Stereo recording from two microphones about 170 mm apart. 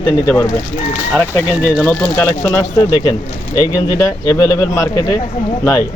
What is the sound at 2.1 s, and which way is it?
Speech, 15° left (ahead or behind).